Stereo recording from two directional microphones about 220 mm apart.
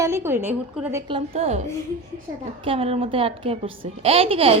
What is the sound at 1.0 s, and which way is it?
Speech, 25° right (ahead or behind).